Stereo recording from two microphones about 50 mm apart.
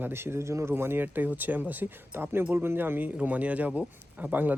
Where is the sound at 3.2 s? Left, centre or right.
Right.